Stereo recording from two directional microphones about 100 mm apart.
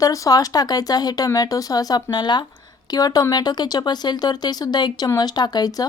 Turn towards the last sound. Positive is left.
turn(degrees=40)  # may be behind; listen again after turning